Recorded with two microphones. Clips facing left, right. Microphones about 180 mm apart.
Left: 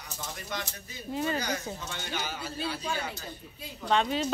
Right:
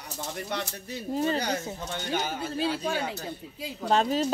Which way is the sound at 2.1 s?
50° right (ahead or behind).